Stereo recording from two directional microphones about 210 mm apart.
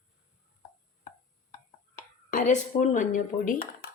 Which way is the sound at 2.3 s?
40° left (ahead or behind).